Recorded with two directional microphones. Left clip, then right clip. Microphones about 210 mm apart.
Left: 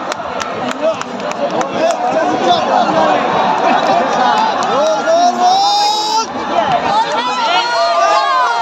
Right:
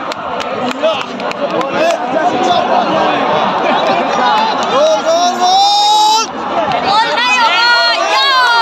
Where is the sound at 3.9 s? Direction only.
40° left (ahead or behind).